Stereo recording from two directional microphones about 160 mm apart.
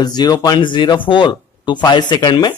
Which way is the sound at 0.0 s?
25° left (ahead or behind).